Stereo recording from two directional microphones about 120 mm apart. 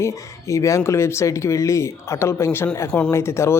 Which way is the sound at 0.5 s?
25° left (ahead or behind).